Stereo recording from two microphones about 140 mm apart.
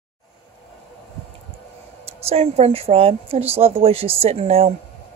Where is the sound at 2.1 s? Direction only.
45° right (ahead or behind).